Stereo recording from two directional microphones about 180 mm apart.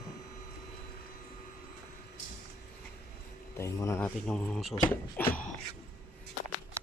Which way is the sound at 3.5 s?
15° left (ahead or behind).